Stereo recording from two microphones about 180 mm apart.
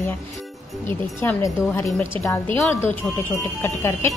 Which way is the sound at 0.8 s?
15° left (ahead or behind).